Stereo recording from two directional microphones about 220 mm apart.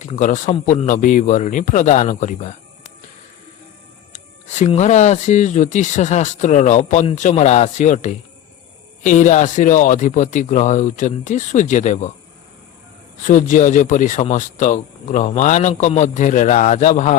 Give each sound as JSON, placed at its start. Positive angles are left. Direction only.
{"t": 0.0, "sound": "speech", "side_deg": 35}
{"t": 4.1, "sound": "speech", "side_deg": 30}
{"t": 13.2, "sound": "speech", "side_deg": 35}